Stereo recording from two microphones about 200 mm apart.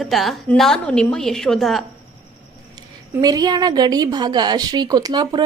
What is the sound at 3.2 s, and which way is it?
A woman's voice, 20° right (ahead or behind).